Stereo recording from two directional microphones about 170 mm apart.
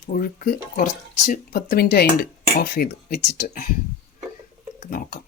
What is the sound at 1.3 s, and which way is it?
Speech, 60° left (ahead or behind).